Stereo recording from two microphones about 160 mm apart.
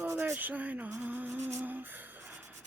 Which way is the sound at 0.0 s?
10° right (ahead or behind).